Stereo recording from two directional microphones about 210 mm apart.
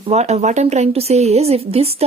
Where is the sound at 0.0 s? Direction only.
30° right (ahead or behind).